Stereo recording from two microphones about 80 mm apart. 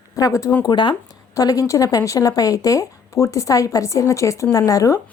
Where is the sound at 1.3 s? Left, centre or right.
Left.